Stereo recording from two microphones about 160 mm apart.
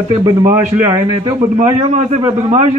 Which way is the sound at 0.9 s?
20° right (ahead or behind).